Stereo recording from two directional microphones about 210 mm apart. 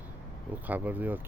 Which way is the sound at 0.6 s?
10° right (ahead or behind).